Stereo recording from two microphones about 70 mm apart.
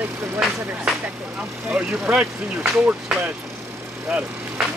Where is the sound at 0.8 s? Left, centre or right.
Centre.